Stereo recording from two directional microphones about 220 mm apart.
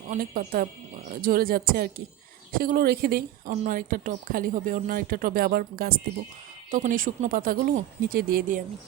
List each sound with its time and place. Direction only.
0.1 s speech: 40° right (ahead or behind)